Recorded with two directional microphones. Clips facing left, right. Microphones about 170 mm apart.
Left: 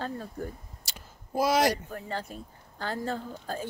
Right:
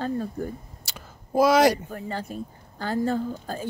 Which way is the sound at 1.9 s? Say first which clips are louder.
Right 4 dB; 10° right (ahead or behind).